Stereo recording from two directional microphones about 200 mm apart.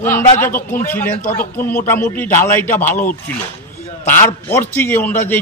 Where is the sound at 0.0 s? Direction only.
10° left (ahead or behind).